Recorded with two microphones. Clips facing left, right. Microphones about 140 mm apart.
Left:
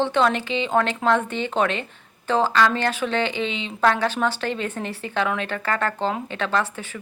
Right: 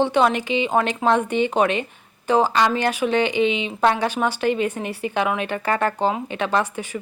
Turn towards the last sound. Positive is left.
turn(degrees=-15)  # may be behind; listen again after turning